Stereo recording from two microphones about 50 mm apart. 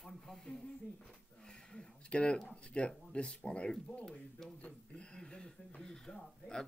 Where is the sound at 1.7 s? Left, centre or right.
Left.